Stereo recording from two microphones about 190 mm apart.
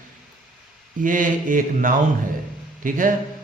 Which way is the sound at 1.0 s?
45° right (ahead or behind).